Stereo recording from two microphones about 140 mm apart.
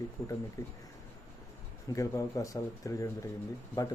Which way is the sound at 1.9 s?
25° left (ahead or behind).